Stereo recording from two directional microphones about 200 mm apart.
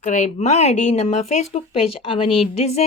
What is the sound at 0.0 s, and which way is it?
Speech, 40° left (ahead or behind).